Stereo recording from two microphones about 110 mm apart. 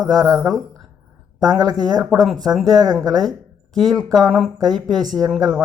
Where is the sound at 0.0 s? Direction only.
35° right (ahead or behind).